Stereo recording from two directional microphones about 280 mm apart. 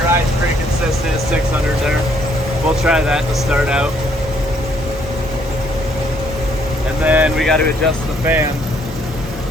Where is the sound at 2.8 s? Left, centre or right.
Centre.